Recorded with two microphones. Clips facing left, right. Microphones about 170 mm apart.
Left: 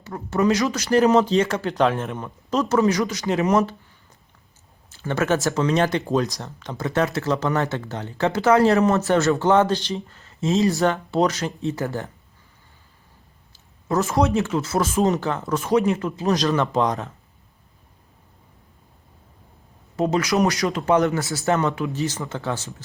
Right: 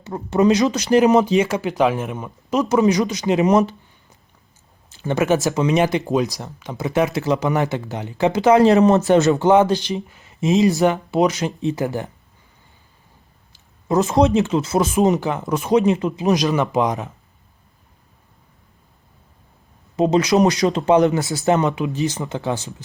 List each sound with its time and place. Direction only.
0.0 s speech: 20° right (ahead or behind)
4.9 s speech: 15° right (ahead or behind)
13.5 s speech: 20° right (ahead or behind)
20.0 s speech: 20° right (ahead or behind)